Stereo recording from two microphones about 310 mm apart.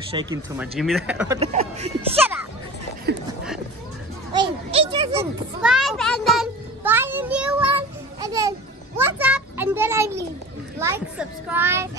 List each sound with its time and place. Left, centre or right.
0.1 s a child's voice: centre
0.7 s speech: centre
1.4 s speech: centre
4.3 s children playing: centre
5.6 s a sound: centre
10.8 s a child's voice: centre